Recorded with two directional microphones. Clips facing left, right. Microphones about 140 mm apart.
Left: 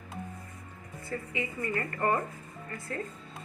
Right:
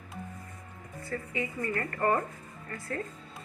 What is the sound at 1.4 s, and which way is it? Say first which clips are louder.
Speech: right 1 dB; 20° left (ahead or behind).